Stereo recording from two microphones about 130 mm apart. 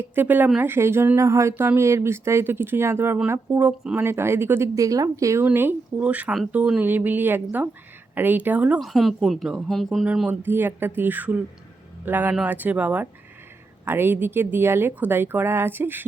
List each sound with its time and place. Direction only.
0.0 s speech: 15° right (ahead or behind)
5.5 s speech: 15° right (ahead or behind)
8.8 s speech: centre (ahead or behind)
10.1 s speech: 10° right (ahead or behind)